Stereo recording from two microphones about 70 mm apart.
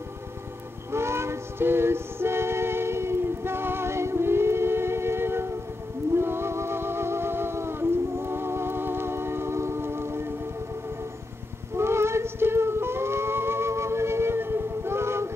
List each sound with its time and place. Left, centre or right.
0.9 s music: right
11.7 s music: right